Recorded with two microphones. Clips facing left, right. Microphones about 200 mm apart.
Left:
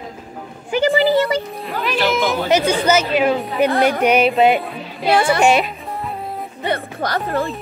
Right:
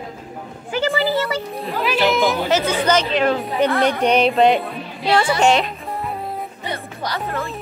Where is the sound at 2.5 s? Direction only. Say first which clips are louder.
Left 2 dB; 10° left (ahead or behind).